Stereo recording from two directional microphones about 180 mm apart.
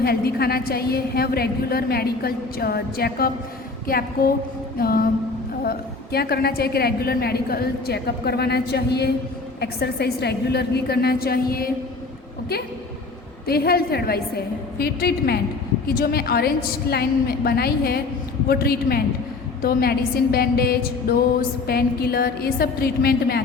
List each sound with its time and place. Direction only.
0.0 s a woman's voice: 60° left (ahead or behind)
13.5 s a woman's voice: 60° left (ahead or behind)